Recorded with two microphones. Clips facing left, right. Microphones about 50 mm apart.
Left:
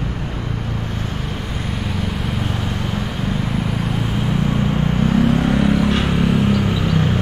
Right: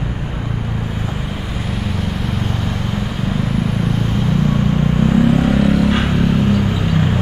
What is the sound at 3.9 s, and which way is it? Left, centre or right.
Vehicle, centre.